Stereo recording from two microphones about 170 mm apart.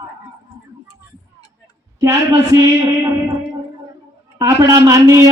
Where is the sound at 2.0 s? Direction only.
15° right (ahead or behind).